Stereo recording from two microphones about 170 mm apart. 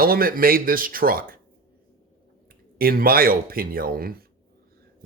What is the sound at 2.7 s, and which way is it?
Speech, 60° right (ahead or behind).